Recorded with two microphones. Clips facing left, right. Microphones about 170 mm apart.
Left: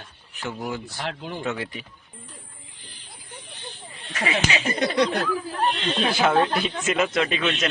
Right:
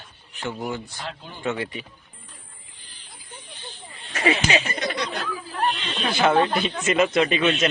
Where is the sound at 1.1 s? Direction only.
80° left.